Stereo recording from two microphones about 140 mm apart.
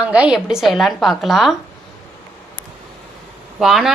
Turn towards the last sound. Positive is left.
turn(degrees=-5)  # may be behind; listen again after turning